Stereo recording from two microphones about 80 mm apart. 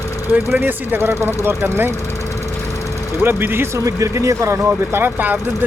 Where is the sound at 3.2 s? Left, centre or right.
Right.